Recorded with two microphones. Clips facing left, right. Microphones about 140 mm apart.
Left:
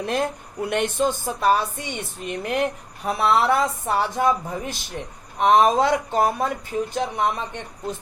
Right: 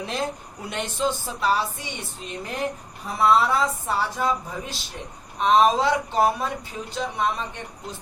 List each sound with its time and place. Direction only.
0.0 s speech: 55° left (ahead or behind)